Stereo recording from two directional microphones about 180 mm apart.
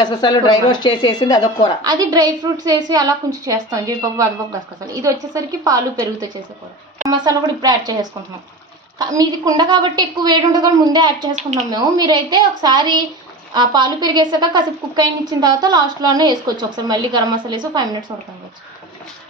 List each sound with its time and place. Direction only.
0.0 s a woman's voice: 25° left (ahead or behind)
1.8 s a woman's voice: 20° right (ahead or behind)